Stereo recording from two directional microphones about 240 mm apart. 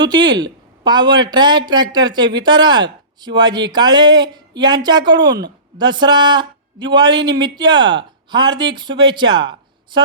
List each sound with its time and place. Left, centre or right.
0.0 s speech: centre